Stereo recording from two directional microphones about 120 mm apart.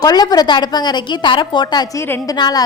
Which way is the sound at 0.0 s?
35° left (ahead or behind).